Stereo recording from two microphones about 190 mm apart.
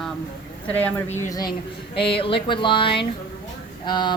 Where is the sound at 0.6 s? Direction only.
10° left (ahead or behind).